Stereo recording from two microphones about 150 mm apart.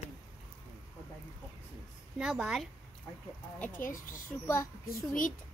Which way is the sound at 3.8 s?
65° left (ahead or behind).